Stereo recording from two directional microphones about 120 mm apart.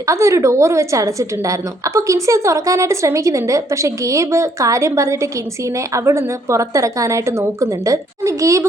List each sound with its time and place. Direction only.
0.1 s a woman's voice: 25° right (ahead or behind)